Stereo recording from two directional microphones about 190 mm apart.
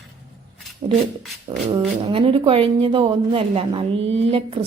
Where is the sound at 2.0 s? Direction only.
25° right (ahead or behind).